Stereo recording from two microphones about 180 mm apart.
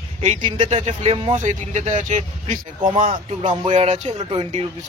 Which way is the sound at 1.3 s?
40° right (ahead or behind).